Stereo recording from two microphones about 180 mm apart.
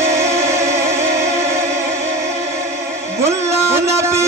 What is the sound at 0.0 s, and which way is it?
Music, 15° right (ahead or behind).